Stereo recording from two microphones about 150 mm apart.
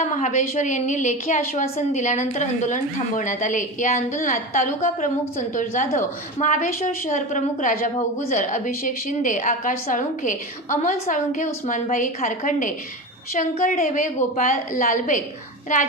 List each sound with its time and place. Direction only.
0.0 s a woman's voice: 50° left (ahead or behind)